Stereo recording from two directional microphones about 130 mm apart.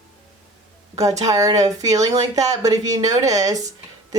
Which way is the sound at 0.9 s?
30° right (ahead or behind).